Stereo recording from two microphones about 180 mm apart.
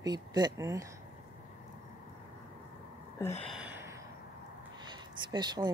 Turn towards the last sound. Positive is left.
turn(degrees=-25)  # may be behind; listen again after turning